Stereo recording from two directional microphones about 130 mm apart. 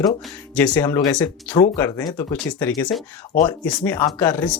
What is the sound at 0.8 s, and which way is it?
Speech, 20° left (ahead or behind).